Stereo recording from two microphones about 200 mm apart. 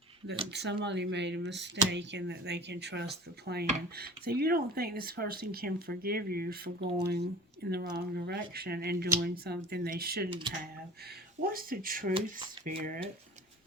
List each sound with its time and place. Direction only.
0.5 s speech: 60° right (ahead or behind)
11.5 s speech: 45° right (ahead or behind)